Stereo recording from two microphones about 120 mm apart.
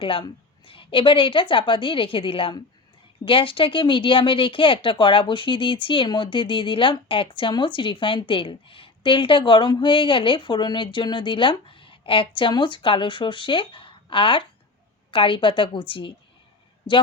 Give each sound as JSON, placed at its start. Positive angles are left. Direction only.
{"t": 0.0, "sound": "speech", "side_deg": 45}